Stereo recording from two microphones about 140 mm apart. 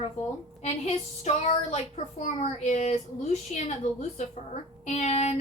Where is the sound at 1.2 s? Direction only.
50° left (ahead or behind).